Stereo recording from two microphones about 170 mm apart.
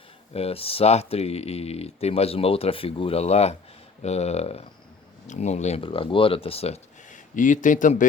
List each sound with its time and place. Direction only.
0.3 s speech: 35° left (ahead or behind)